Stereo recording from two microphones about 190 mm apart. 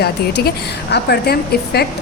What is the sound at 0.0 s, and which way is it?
A woman's voice, 60° left (ahead or behind).